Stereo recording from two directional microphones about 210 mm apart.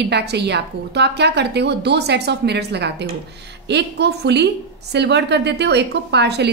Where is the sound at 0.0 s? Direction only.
55° right (ahead or behind).